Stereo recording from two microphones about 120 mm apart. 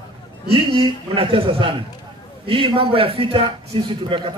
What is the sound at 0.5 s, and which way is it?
A man's voice, 50° right (ahead or behind).